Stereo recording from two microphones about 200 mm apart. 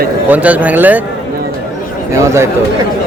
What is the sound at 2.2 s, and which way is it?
Speech, 15° right (ahead or behind).